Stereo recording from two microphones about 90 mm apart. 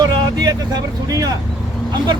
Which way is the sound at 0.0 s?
45° right (ahead or behind).